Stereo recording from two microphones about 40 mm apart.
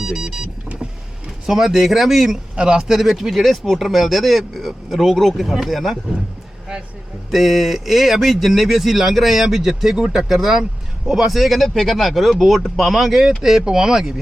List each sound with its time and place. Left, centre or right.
0.0 s vehicle: centre
1.5 s speech: centre
2.6 s speech: right
2.8 s speech: centre
7.3 s speech: centre
11.3 s speech: centre